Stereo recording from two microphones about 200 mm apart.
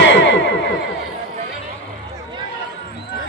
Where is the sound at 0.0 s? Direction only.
65° left (ahead or behind).